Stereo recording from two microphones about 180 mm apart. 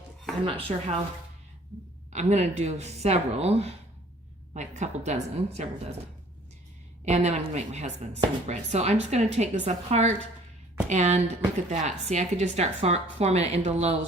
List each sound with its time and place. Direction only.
0.4 s a woman's voice: 30° right (ahead or behind)
2.1 s a woman's voice: 40° right (ahead or behind)
7.0 s a woman's voice: 40° right (ahead or behind)